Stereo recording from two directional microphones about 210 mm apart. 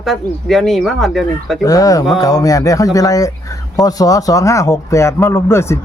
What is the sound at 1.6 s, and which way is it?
Speech, 15° left (ahead or behind).